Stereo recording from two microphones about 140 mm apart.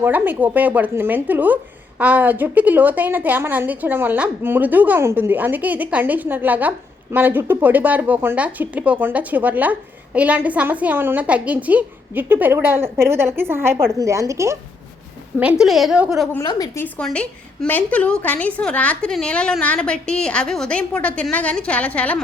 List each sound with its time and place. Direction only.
0.0 s a woman's voice: 10° right (ahead or behind)
15.4 s a woman's voice: 5° right (ahead or behind)
16.4 s a woman's voice: 25° left (ahead or behind)
16.8 s a woman's voice: 5° left (ahead or behind)